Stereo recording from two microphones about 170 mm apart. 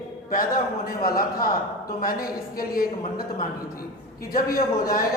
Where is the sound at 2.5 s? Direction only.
60° left (ahead or behind).